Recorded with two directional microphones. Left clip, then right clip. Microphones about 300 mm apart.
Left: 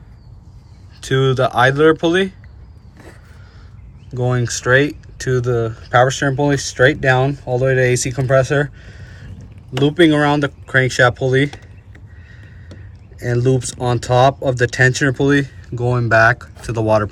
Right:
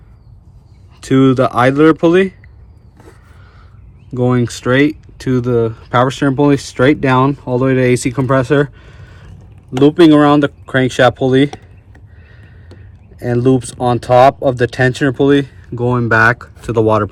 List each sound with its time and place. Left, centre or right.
1.0 s speech: right
4.4 s speech: centre
8.3 s a sound: centre
10.1 s speech: centre
13.1 s speech: centre